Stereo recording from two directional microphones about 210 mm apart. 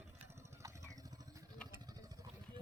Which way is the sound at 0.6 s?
15° right (ahead or behind).